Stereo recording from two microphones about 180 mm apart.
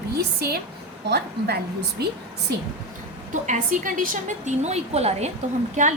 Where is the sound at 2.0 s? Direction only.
65° right (ahead or behind).